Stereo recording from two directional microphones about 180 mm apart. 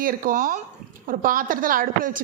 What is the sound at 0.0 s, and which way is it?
A woman's voice, 50° right (ahead or behind).